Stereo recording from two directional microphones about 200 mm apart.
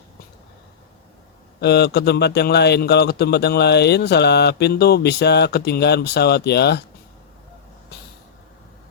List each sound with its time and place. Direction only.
1.6 s speech: 55° left (ahead or behind)